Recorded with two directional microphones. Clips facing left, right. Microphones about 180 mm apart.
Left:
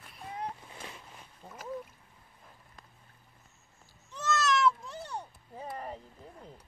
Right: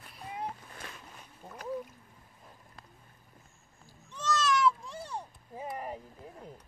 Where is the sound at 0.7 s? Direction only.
15° left (ahead or behind).